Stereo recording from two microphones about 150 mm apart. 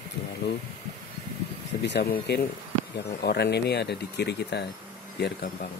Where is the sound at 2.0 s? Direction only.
90° left.